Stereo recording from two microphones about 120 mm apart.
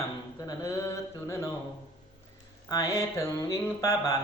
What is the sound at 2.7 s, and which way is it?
Speech, 30° left (ahead or behind).